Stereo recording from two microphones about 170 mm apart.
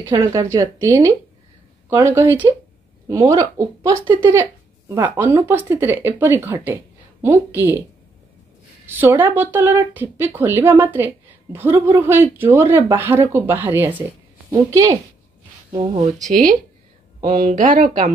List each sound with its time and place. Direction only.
0.0 s a woman's voice: 15° right (ahead or behind)
2.1 s a woman's voice: 10° right (ahead or behind)
4.0 s speech: 30° right (ahead or behind)
4.3 s a woman's voice: 15° right (ahead or behind)
8.8 s a woman's voice: 10° right (ahead or behind)
15.7 s speech: 30° right (ahead or behind)
17.2 s speech: 50° right (ahead or behind)